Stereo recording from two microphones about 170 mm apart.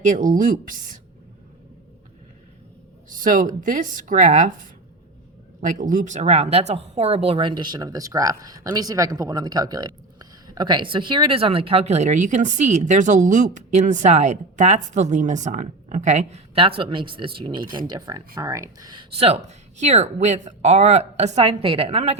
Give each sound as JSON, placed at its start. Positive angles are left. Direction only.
{"t": 0.0, "sound": "speech", "side_deg": -50}
{"t": 3.1, "sound": "speech", "side_deg": -55}
{"t": 5.5, "sound": "speech", "side_deg": -50}
{"t": 19.1, "sound": "speech", "side_deg": -35}